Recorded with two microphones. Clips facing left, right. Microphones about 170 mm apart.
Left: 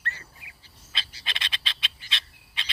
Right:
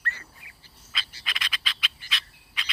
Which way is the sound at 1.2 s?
25° left (ahead or behind).